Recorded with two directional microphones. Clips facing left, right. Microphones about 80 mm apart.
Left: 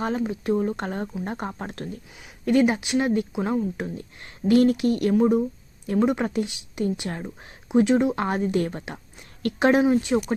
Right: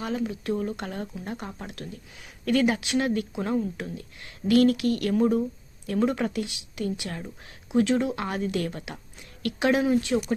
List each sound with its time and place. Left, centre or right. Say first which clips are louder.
0.0 s speech: left 4 dB; left
2.4 s speech: left 3 dB; left
3.8 s speech: left 4 dB; left
9.8 s speech: left 3 dB; left